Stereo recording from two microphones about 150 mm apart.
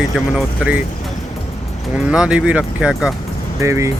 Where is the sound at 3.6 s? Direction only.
20° right (ahead or behind).